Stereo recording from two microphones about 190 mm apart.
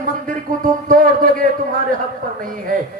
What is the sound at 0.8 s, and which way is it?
Speech, 45° right (ahead or behind).